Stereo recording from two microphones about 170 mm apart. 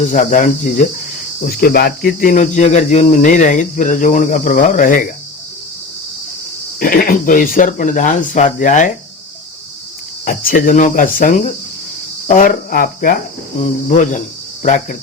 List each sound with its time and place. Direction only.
0.1 s cricket: 50° left (ahead or behind)
1.5 s cricket: 60° left (ahead or behind)
6.7 s cricket: 55° left (ahead or behind)
10.2 s cricket: 55° left (ahead or behind)
12.3 s speech: 50° left (ahead or behind)
13.9 s cricket: 45° left (ahead or behind)